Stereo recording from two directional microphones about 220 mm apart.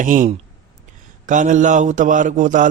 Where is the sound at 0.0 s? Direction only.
35° right (ahead or behind).